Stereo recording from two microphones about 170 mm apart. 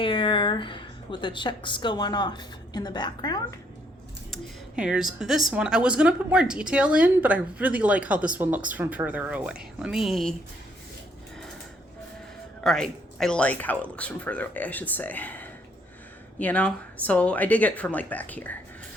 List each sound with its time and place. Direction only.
0.0 s speech: 30° left (ahead or behind)
4.3 s speech: 5° right (ahead or behind)
12.6 s speech: 5° left (ahead or behind)